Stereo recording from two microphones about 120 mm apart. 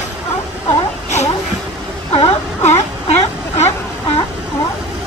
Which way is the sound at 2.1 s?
50° left (ahead or behind).